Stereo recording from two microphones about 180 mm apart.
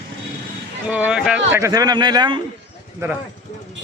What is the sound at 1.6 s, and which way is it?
Speech, 20° right (ahead or behind).